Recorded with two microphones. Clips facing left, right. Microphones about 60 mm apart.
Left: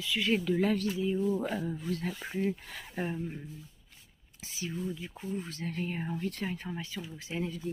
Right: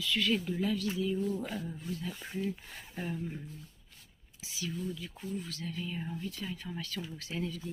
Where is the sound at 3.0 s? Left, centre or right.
Left.